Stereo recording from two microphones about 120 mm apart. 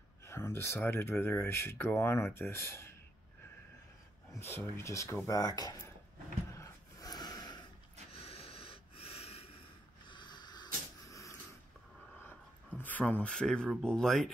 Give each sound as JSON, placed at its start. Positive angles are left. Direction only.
{"t": 0.3, "sound": "speech", "side_deg": 20}
{"t": 4.4, "sound": "speech", "side_deg": 20}
{"t": 6.5, "sound": "a sound", "side_deg": 30}
{"t": 8.1, "sound": "snort", "side_deg": 50}
{"t": 10.0, "sound": "a sound", "side_deg": 40}
{"t": 12.2, "sound": "speech", "side_deg": 15}